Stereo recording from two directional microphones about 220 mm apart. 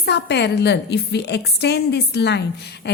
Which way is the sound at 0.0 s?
50° left (ahead or behind).